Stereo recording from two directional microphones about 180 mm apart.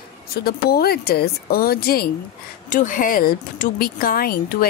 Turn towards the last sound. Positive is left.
turn(degrees=55)  # may be behind; listen again after turning